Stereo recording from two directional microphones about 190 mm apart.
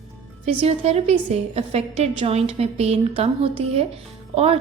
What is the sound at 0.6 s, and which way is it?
A woman's voice, 35° right (ahead or behind).